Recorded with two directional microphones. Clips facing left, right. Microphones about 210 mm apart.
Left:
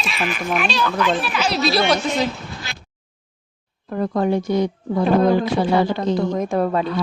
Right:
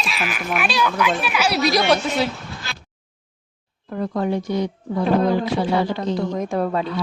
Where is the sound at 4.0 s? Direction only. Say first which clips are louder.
Left 3 dB; 50° left (ahead or behind).